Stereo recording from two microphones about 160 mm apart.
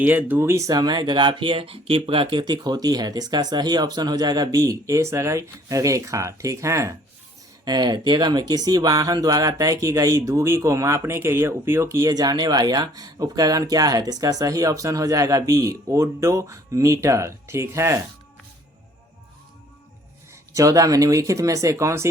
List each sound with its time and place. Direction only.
0.0 s speech: 10° right (ahead or behind)
20.5 s speech: 20° right (ahead or behind)